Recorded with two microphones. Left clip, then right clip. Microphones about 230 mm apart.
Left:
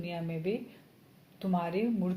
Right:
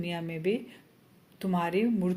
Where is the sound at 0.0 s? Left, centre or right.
Right.